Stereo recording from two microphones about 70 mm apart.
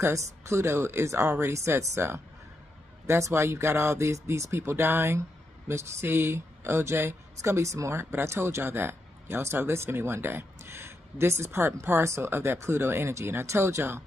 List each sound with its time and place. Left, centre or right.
0.0 s speech: right